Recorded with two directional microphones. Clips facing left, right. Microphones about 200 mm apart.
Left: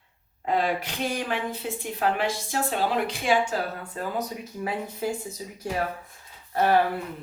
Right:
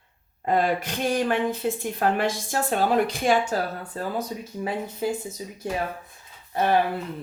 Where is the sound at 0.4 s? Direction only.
45° right (ahead or behind).